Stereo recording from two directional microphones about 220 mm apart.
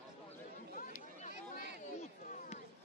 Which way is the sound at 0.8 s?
35° left (ahead or behind).